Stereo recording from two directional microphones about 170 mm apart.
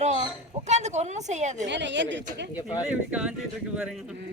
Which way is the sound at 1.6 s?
90° right.